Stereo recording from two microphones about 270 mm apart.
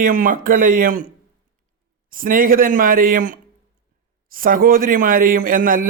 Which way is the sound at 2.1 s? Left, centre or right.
Right.